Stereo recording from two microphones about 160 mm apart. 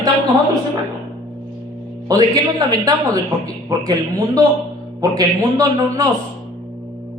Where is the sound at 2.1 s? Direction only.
25° right (ahead or behind).